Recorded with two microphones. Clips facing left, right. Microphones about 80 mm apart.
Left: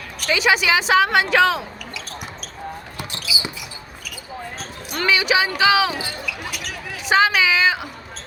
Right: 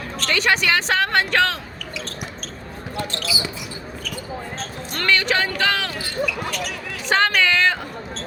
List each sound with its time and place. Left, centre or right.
0.2 s speech: centre
3.0 s basketball bounce: centre
4.6 s speech: centre